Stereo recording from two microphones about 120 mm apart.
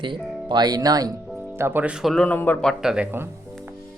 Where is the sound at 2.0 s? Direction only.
5° left (ahead or behind).